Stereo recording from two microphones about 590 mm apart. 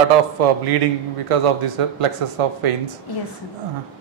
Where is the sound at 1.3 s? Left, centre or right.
Right.